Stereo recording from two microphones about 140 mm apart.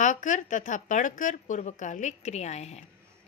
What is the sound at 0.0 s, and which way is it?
A woman's voice, 65° left (ahead or behind).